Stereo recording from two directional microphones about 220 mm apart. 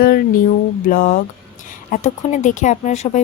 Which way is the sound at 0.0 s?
45° left (ahead or behind).